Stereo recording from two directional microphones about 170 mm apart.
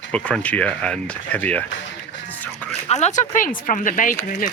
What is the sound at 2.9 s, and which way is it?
Speech, 45° left (ahead or behind).